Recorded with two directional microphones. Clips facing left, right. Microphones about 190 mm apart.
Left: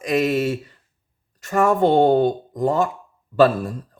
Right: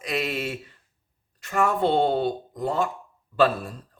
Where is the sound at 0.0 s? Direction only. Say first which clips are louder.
Left 9 dB; 45° left (ahead or behind).